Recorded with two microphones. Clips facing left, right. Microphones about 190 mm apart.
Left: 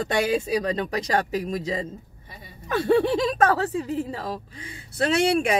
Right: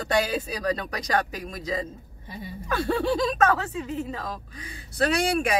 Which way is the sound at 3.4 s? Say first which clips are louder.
Left 2 dB; 35° left (ahead or behind).